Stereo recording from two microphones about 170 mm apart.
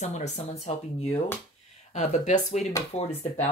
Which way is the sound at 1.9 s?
45° left (ahead or behind).